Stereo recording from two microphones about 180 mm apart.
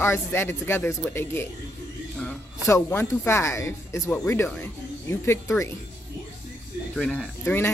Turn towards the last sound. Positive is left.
turn(degrees=10)  # may be behind; listen again after turning